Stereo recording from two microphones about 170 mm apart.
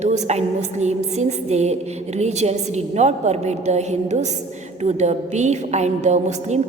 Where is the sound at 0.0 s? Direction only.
40° right (ahead or behind).